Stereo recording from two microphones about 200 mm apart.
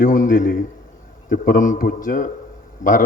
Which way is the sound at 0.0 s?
40° left (ahead or behind).